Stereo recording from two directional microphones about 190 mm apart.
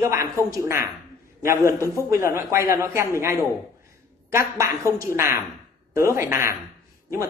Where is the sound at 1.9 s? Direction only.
15° right (ahead or behind).